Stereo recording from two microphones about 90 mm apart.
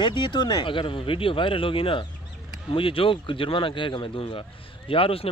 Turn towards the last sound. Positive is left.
turn(degrees=90)